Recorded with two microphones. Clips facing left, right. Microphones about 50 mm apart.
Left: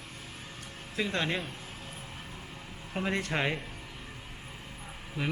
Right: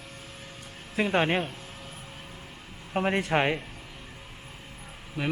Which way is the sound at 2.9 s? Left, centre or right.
Right.